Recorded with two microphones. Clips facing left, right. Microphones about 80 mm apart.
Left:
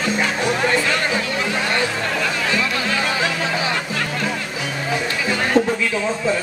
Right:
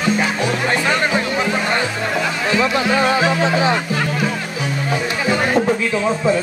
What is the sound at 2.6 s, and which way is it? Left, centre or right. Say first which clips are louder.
Music: right 5 dB; right.